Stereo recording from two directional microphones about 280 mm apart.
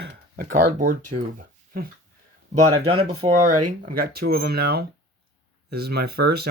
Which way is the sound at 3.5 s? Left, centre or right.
Right.